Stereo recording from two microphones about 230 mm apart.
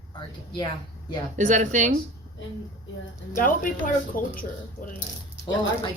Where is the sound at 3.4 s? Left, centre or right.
Left.